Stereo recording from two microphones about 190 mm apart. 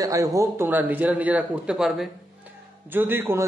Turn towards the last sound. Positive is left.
turn(degrees=-10)  # may be behind; listen again after turning